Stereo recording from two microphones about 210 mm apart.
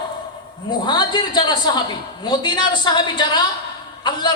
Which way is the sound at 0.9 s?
20° left (ahead or behind).